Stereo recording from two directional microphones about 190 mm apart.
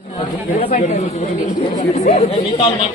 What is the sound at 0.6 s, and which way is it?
Speech, 40° left (ahead or behind).